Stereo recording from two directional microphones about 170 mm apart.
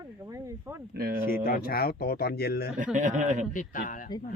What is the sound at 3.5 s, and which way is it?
Speech, 50° left (ahead or behind).